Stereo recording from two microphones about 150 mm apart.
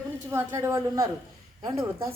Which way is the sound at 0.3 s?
15° right (ahead or behind).